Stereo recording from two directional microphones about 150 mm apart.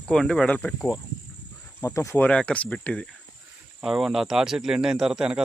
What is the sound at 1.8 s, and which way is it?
Speech, 20° left (ahead or behind).